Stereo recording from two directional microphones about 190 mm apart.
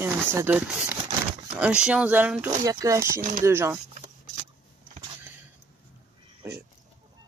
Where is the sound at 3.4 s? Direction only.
15° right (ahead or behind).